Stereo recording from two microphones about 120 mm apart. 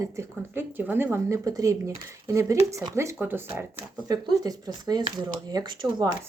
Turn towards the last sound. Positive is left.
turn(degrees=-40)  # may be behind; listen again after turning